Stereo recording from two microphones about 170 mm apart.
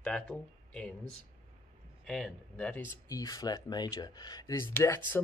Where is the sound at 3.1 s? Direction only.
20° left (ahead or behind).